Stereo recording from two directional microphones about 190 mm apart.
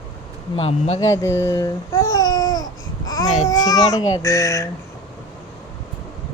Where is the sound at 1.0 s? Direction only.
15° left (ahead or behind).